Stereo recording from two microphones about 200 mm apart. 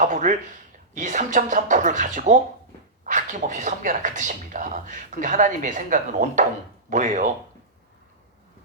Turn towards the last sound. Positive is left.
turn(degrees=-40)  # may be behind; listen again after turning